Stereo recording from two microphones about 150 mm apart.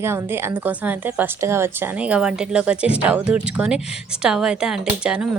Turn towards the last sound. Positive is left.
turn(degrees=-5)  # may be behind; listen again after turning